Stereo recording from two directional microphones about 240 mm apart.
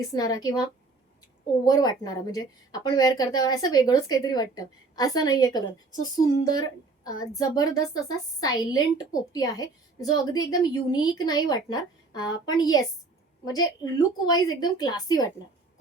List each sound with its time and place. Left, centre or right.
0.1 s a woman's voice: centre